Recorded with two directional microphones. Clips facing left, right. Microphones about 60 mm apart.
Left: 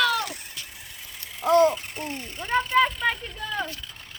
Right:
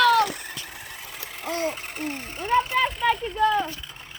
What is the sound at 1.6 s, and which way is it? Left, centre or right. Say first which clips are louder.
Vehicle: left 7 dB; right.